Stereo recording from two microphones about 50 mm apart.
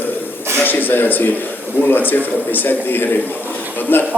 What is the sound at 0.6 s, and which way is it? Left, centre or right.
A man's voice, left.